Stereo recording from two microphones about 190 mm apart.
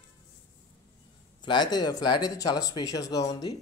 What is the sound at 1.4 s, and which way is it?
Speech, 25° left (ahead or behind).